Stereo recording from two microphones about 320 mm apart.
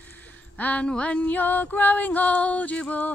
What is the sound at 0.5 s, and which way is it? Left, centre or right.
Mantra, centre.